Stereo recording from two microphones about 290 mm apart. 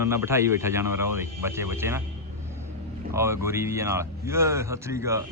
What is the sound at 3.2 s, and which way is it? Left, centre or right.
A man's voice, centre.